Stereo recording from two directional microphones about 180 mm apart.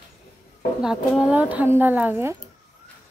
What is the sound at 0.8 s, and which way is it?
Speech, 5° right (ahead or behind).